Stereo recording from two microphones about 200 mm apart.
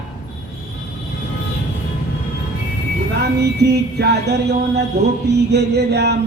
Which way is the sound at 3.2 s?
55° right (ahead or behind).